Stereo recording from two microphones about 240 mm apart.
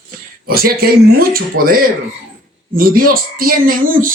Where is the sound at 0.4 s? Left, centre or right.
Right.